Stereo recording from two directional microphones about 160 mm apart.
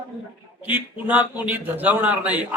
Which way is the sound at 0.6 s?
10° right (ahead or behind).